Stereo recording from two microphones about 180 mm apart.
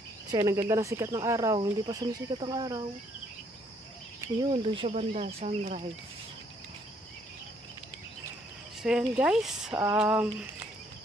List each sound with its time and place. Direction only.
0.3 s speech: 20° right (ahead or behind)
4.2 s speech: 25° right (ahead or behind); by 5.8 s 40° right (ahead or behind)
8.8 s speech: 5° right (ahead or behind)